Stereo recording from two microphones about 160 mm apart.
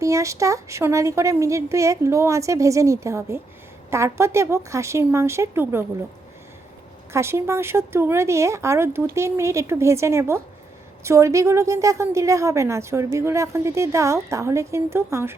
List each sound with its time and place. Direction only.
0.0 s a woman's voice: 20° right (ahead or behind)
7.1 s a woman's voice: 15° right (ahead or behind)